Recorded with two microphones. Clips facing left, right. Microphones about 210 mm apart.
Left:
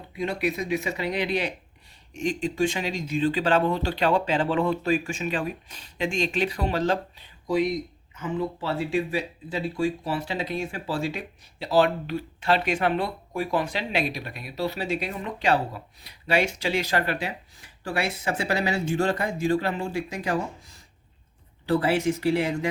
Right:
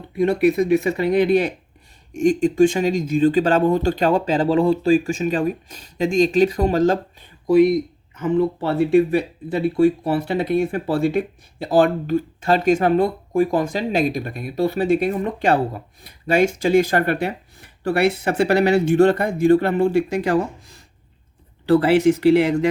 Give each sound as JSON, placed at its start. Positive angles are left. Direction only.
{"t": 0.2, "sound": "speech", "side_deg": -55}